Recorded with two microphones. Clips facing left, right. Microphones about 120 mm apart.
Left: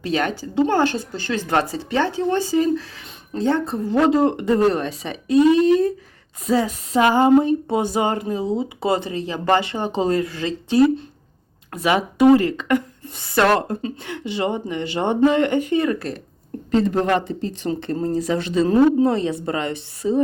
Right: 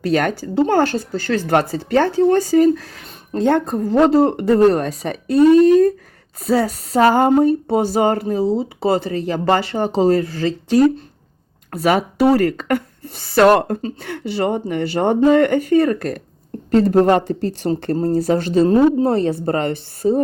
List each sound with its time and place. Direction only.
0.1 s speech: 50° right (ahead or behind)
3.8 s speech: 40° right (ahead or behind)
12.5 s speech: 50° right (ahead or behind)
19.0 s speech: 45° right (ahead or behind)